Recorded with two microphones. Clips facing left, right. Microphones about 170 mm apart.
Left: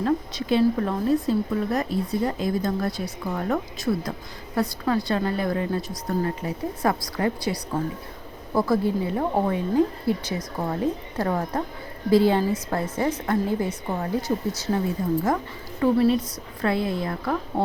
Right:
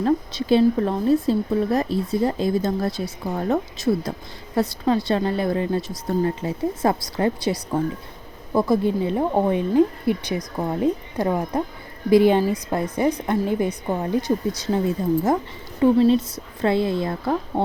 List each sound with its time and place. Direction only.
0.0 s a woman's voice: 30° right (ahead or behind)